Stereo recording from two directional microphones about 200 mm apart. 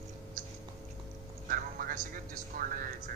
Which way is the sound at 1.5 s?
45° right (ahead or behind).